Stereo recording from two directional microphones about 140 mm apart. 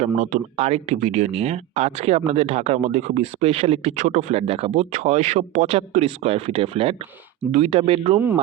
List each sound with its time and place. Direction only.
0.0 s speech: 60° right (ahead or behind); by 8.2 s 40° right (ahead or behind)